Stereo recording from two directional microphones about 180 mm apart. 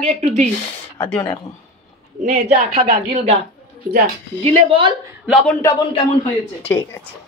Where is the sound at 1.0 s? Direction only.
30° left (ahead or behind).